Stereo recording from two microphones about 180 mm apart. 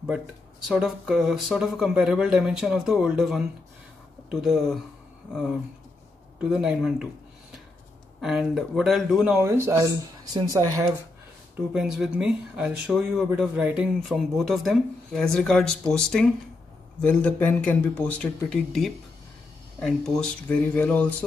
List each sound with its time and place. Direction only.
0.7 s speech: centre (ahead or behind)
8.2 s speech: centre (ahead or behind)
9.4 s speech: 15° right (ahead or behind)
11.7 s speech: 5° right (ahead or behind)